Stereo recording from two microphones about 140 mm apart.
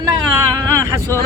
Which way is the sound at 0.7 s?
20° right (ahead or behind).